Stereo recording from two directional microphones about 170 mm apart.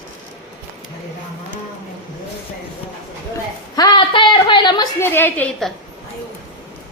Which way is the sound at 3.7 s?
25° left (ahead or behind).